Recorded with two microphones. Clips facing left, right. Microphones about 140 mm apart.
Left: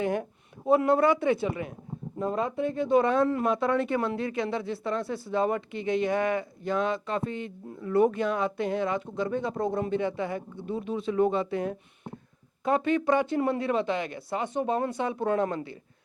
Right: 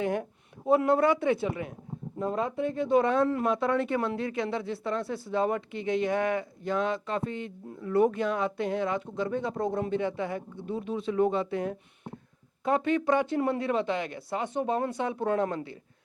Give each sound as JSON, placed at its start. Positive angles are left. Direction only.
{"t": 0.0, "sound": "a sound", "side_deg": 15}
{"t": 0.7, "sound": "speech", "side_deg": 15}
{"t": 2.1, "sound": "speech", "side_deg": 30}
{"t": 2.4, "sound": "speech", "side_deg": 15}